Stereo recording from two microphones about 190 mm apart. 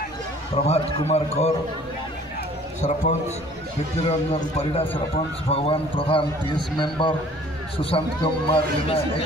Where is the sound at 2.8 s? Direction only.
35° left (ahead or behind).